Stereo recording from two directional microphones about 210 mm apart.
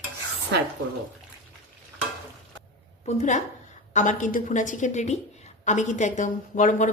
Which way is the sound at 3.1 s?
35° left (ahead or behind).